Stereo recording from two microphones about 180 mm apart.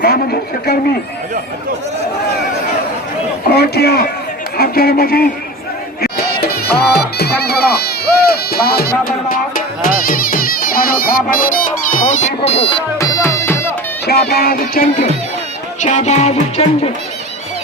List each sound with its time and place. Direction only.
0.0 s a man's voice: 60° left (ahead or behind)
3.5 s a man's voice: 60° left (ahead or behind)
6.9 s speech: 65° left (ahead or behind); by 12.3 s 45° left (ahead or behind)
12.4 s music: 30° left (ahead or behind)
13.0 s music: 20° left (ahead or behind)
14.1 s a man's voice: 60° left (ahead or behind)
15.8 s music: 40° left (ahead or behind)